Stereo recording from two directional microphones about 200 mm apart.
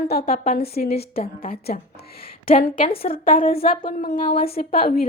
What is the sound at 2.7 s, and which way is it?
Speech, 25° left (ahead or behind).